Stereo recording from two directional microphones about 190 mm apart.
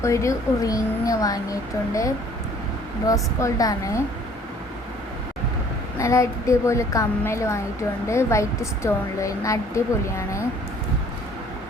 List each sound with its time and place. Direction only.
0.0 s a woman's voice: 15° left (ahead or behind)
6.0 s a woman's voice: 15° left (ahead or behind)